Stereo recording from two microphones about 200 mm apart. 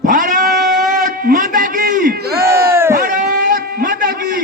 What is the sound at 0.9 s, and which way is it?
A man's voice, 45° right (ahead or behind).